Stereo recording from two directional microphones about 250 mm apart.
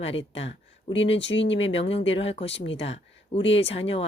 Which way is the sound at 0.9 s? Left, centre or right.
Left.